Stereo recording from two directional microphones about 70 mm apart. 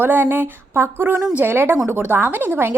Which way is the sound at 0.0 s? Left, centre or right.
Right.